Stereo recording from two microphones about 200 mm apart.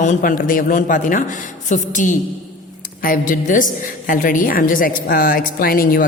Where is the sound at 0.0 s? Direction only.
40° left (ahead or behind).